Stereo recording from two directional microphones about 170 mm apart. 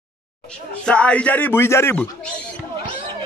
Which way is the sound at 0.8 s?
5° left (ahead or behind).